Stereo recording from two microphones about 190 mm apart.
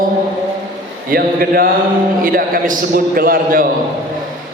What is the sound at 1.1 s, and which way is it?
A man's voice, 50° right (ahead or behind).